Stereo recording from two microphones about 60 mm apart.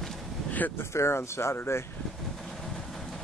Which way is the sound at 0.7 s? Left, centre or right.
Left.